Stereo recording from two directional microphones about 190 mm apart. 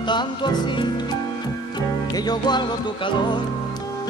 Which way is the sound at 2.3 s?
20° left (ahead or behind).